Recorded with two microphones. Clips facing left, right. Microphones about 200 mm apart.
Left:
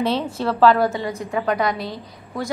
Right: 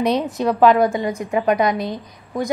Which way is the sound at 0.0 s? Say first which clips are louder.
Right 3 dB; 15° right (ahead or behind).